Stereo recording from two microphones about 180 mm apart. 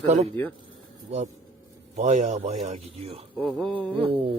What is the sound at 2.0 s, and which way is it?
A man's voice, 40° right (ahead or behind).